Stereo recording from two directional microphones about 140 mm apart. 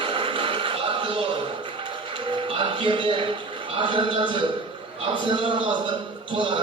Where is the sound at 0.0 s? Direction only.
40° right (ahead or behind).